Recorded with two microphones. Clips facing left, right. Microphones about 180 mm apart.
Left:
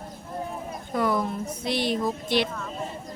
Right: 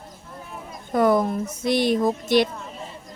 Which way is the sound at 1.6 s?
45° right (ahead or behind).